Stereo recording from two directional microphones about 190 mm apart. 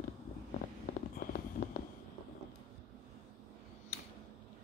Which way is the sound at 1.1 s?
50° left (ahead or behind).